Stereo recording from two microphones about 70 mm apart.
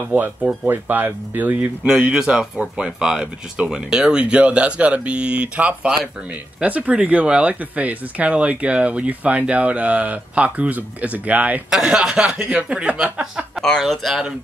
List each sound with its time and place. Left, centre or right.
0.1 s speech: right
1.9 s speech: centre
11.7 s speech: centre
13.6 s speech: centre